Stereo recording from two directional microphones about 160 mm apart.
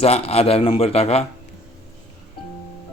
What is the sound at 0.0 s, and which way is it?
A man's voice, 40° left (ahead or behind).